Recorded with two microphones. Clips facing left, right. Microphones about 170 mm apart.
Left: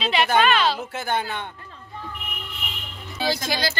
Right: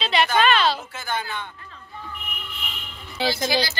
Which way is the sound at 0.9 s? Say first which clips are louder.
Left 3 dB; 60° left (ahead or behind).